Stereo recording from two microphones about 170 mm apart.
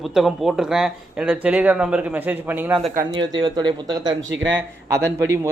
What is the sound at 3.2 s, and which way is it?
Speech, 25° right (ahead or behind).